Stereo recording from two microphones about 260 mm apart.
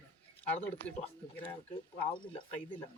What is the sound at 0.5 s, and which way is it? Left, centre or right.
Speech, centre.